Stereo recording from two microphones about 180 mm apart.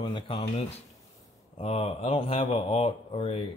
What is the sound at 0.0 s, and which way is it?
Speech, 30° left (ahead or behind).